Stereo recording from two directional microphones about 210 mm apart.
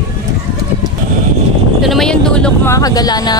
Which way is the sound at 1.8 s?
Centre (ahead or behind).